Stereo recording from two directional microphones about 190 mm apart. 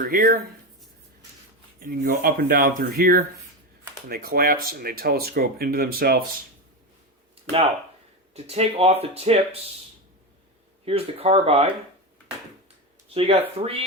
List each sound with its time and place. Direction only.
0.0 s speech: 45° right (ahead or behind)
1.8 s speech: 50° right (ahead or behind)
8.3 s speech: 35° right (ahead or behind)
10.8 s speech: 30° right (ahead or behind)
13.1 s speech: 30° right (ahead or behind)